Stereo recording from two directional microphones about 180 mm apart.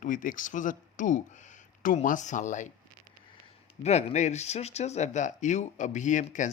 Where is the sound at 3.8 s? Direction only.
35° left (ahead or behind).